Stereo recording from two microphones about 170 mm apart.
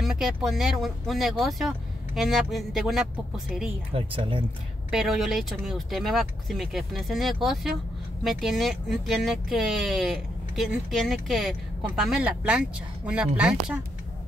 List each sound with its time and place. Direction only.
0.0 s speech: centre (ahead or behind)
3.9 s speech: 30° right (ahead or behind)
4.9 s speech: 5° right (ahead or behind)